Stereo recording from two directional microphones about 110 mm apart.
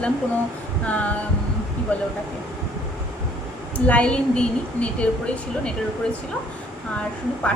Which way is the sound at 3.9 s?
10° left (ahead or behind).